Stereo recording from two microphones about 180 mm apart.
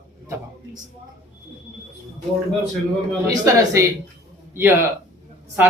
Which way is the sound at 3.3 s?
15° right (ahead or behind).